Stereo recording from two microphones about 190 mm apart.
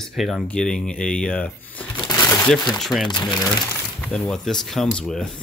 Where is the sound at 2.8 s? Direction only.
Centre (ahead or behind).